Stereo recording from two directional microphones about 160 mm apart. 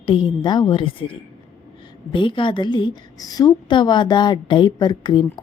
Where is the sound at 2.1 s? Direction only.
30° left (ahead or behind).